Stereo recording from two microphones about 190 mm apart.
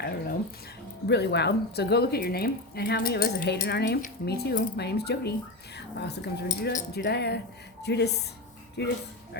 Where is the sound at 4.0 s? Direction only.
50° left (ahead or behind).